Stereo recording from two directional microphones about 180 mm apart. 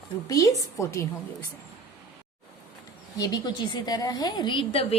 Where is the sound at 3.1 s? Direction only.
20° left (ahead or behind).